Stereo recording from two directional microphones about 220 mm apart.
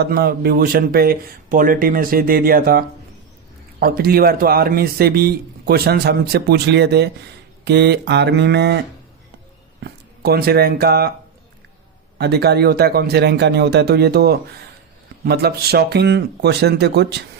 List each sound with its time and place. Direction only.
0.0 s a man's voice: 45° right (ahead or behind)
9.8 s speech: 45° right (ahead or behind)
12.1 s a man's voice: 45° right (ahead or behind)